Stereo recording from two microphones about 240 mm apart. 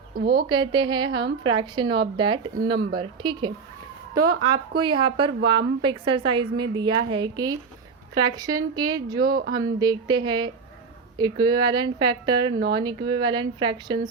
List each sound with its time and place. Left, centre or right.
0.2 s a woman's voice: right
0.4 s a woman's voice: centre
2.7 s speech: right
3.0 s a woman's voice: centre
4.8 s a woman's voice: centre